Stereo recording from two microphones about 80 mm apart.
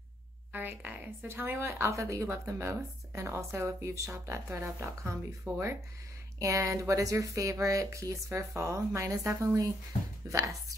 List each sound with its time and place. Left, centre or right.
0.5 s a woman's voice: right